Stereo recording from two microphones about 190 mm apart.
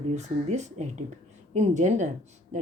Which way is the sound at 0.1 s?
35° right (ahead or behind).